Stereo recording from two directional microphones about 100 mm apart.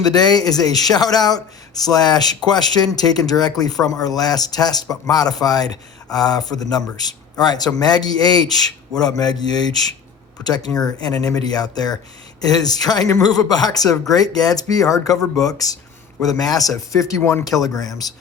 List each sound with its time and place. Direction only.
0.0 s speech: 40° left (ahead or behind)